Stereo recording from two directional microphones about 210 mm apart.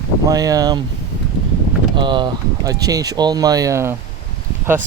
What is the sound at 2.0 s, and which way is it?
Speech, 25° right (ahead or behind).